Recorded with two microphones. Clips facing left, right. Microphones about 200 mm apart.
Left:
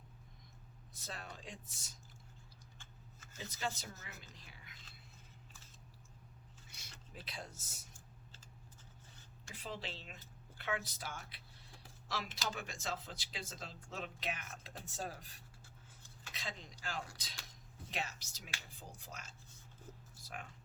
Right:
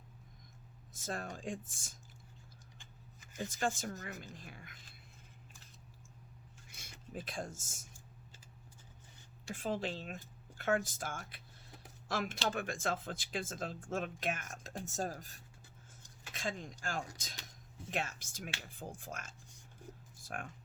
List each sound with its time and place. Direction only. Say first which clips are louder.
0.9 s speech: right 8 dB; 45° right (ahead or behind)
3.3 s speech: right 6 dB; 50° right (ahead or behind)
7.3 s speech: right 4 dB; 50° right (ahead or behind)
9.6 s speech: right 9 dB; 50° right (ahead or behind)